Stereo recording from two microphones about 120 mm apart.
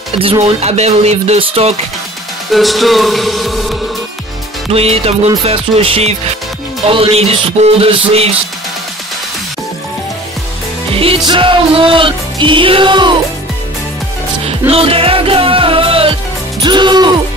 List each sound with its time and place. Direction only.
0.2 s speech: 55° right (ahead or behind)
2.5 s music: centre (ahead or behind)
4.6 s speech: 55° right (ahead or behind)
6.9 s music: 50° right (ahead or behind)
8.1 s speech: 55° right (ahead or behind)
10.9 s music: 50° right (ahead or behind)
14.7 s music: 50° right (ahead or behind)
16.6 s speech: 40° right (ahead or behind)